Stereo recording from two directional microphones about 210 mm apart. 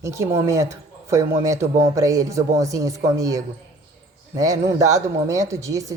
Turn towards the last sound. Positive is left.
turn(degrees=-15)  # may be behind; listen again after turning